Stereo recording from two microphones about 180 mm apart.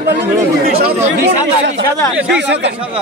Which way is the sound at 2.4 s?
75° right (ahead or behind).